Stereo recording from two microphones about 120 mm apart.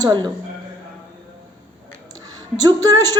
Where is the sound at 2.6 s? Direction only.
30° right (ahead or behind).